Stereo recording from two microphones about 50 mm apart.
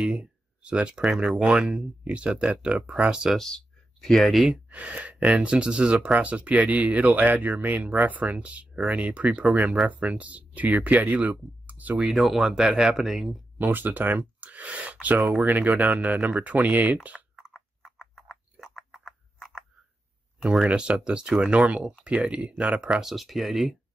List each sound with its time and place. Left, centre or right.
0.0 s speech: centre
3.3 s speech: centre
4.6 s speech: right
12.1 s speech: centre
13.6 s speech: right
17.9 s frog: centre
20.6 s speech: centre
22.8 s speech: centre
23.1 s speech: centre